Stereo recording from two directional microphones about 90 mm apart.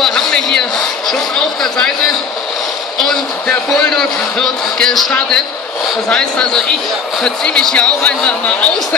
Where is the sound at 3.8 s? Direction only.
5° left (ahead or behind).